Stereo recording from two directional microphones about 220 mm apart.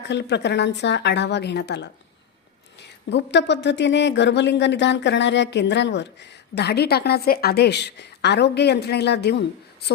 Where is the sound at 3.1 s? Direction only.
50° left (ahead or behind).